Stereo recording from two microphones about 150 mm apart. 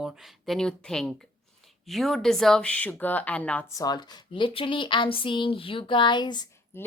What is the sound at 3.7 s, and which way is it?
A woman's voice, 25° left (ahead or behind).